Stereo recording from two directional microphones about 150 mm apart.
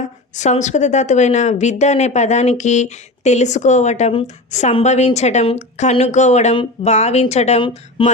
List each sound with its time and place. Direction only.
0.3 s speech: 50° left (ahead or behind)